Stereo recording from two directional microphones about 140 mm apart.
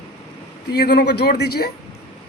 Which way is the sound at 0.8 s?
90° left.